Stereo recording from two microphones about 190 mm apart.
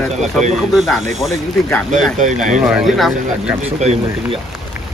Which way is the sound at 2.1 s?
40° right (ahead or behind).